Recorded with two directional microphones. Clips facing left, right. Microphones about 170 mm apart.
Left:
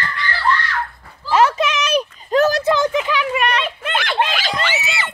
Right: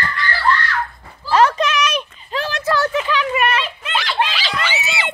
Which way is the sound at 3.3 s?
5° right (ahead or behind).